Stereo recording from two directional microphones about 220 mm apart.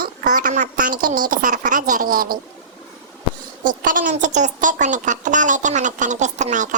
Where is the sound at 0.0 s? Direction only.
40° right (ahead or behind).